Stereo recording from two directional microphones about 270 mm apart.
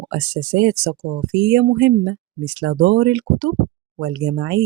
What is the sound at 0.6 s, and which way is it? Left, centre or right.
Speech, right.